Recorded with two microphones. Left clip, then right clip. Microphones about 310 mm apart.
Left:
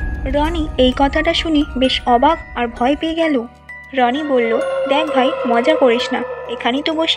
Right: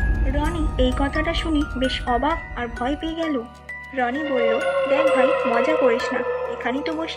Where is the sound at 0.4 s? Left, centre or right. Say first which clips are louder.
Left 8 dB; centre.